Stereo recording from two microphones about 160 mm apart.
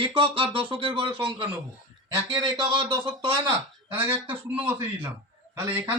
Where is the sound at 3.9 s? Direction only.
10° right (ahead or behind).